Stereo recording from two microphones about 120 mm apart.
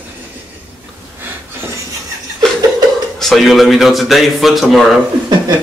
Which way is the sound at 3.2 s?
Centre (ahead or behind).